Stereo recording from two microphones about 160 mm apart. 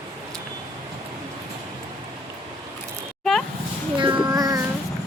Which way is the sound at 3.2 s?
5° left (ahead or behind).